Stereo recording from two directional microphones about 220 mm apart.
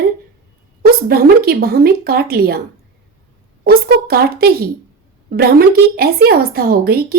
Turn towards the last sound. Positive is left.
turn(degrees=-45)  # may be behind; listen again after turning